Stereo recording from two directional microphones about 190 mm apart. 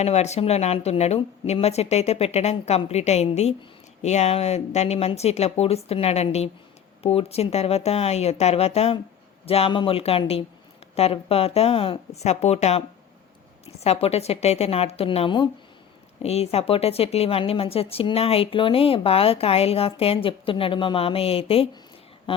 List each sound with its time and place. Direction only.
0.0 s speech: 35° left (ahead or behind)